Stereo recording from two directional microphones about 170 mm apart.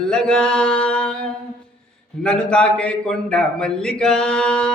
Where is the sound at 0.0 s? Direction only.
5° left (ahead or behind).